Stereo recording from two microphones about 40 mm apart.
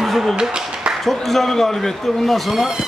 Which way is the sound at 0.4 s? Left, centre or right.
Right.